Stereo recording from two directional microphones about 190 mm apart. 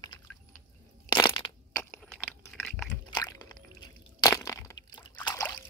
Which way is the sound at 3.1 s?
20° left (ahead or behind).